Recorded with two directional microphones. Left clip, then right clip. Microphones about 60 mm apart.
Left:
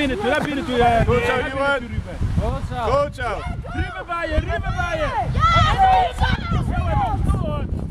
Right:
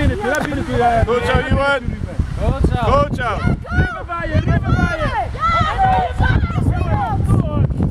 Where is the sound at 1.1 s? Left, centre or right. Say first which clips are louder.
Right 2 dB; right.